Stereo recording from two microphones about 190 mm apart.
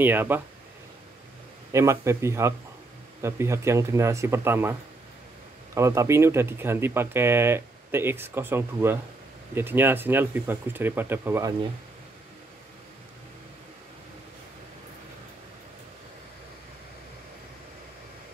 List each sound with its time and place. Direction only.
0.0 s speech: 10° right (ahead or behind)
1.7 s speech: 15° right (ahead or behind)
5.8 s speech: 15° right (ahead or behind)